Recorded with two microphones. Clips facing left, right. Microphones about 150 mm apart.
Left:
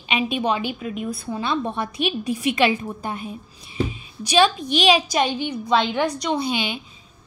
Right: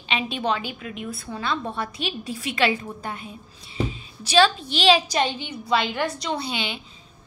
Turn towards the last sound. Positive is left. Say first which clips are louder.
# left 5 dB
turn(degrees=15)  # may be behind; listen again after turning